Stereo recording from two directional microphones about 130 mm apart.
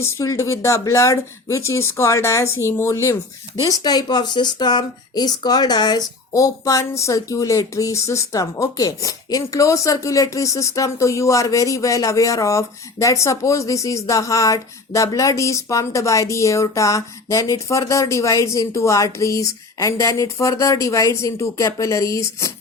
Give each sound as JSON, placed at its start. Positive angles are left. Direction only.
{"t": 0.0, "sound": "speech", "side_deg": 25}